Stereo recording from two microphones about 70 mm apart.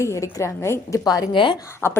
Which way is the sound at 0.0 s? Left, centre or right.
Left.